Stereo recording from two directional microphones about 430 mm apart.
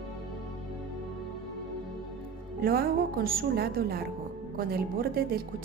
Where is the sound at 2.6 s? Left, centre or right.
Right.